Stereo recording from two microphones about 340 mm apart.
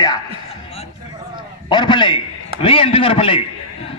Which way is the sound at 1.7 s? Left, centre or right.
Centre.